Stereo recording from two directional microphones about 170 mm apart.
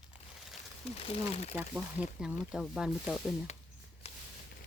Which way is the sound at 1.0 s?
35° left (ahead or behind).